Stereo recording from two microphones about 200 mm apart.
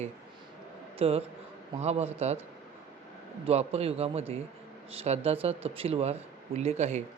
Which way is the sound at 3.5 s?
30° right (ahead or behind).